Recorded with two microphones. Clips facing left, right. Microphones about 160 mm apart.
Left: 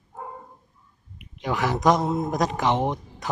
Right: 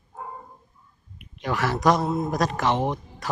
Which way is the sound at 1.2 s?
20° left (ahead or behind).